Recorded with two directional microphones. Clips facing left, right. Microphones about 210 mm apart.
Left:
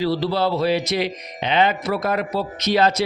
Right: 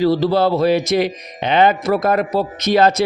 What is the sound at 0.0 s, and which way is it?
Speech, 45° right (ahead or behind).